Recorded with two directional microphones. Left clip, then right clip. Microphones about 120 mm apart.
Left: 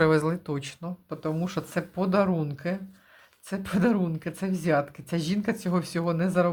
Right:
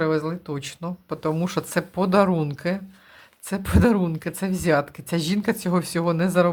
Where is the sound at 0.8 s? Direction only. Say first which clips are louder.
Right 9 dB; 30° right (ahead or behind).